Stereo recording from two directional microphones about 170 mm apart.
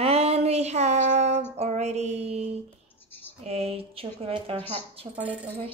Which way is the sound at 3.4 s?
35° right (ahead or behind).